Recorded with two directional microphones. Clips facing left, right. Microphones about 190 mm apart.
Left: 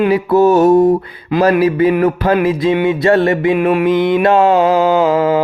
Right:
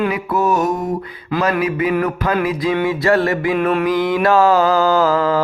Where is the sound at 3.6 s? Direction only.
10° left (ahead or behind).